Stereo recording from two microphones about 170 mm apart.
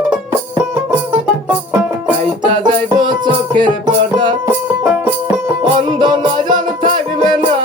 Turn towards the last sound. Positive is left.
turn(degrees=-25)  # may be behind; listen again after turning